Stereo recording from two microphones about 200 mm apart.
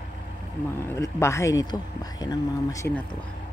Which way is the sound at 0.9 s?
15° left (ahead or behind).